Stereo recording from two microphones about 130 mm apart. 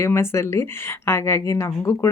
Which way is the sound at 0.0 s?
20° left (ahead or behind).